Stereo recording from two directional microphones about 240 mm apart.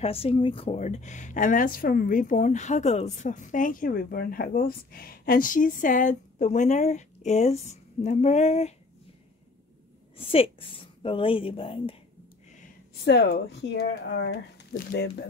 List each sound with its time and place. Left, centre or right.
0.0 s speech: left
10.1 s a woman's voice: left
13.0 s speech: left